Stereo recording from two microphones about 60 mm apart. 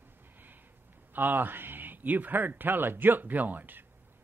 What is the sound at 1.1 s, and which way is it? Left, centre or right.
A man's voice, right.